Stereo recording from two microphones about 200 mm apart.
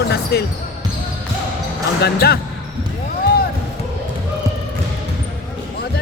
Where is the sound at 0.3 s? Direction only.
55° left (ahead or behind).